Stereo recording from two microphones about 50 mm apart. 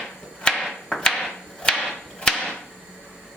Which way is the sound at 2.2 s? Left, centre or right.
Centre.